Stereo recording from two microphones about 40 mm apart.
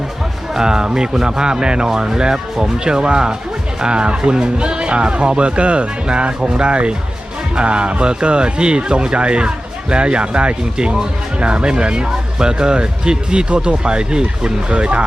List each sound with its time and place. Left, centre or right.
0.5 s speech: centre; by 15.0 s right